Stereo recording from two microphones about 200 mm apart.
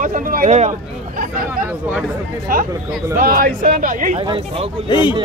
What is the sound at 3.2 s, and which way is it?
Speech, 45° right (ahead or behind).